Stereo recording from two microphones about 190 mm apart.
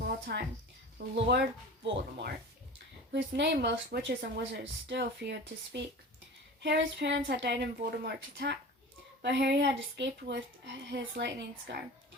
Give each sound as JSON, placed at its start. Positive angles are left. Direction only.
{"t": 0.0, "sound": "music", "side_deg": -60}
{"t": 0.9, "sound": "speech", "side_deg": -60}
{"t": 6.6, "sound": "a sound", "side_deg": -65}
{"t": 7.3, "sound": "speech", "side_deg": -65}